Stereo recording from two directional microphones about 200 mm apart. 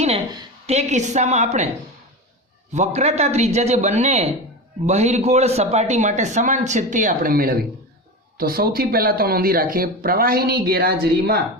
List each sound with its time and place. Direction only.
0.0 s a woman's voice: 30° right (ahead or behind)
2.7 s speech: 35° right (ahead or behind); by 11.3 s 50° right (ahead or behind)